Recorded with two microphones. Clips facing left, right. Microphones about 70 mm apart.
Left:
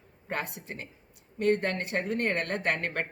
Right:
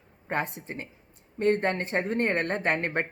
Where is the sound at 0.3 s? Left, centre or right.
Right.